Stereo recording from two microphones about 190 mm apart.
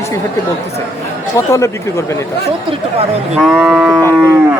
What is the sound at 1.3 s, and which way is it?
Speech, 15° left (ahead or behind).